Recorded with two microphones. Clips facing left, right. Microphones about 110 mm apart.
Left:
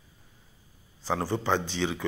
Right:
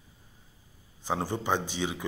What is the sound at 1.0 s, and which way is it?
Speech, 15° right (ahead or behind).